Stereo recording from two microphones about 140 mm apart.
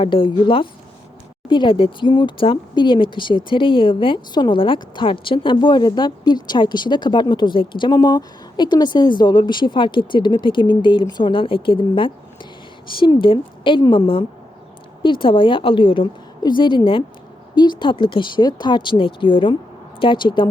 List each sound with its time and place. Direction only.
0.0 s speech: 35° left (ahead or behind)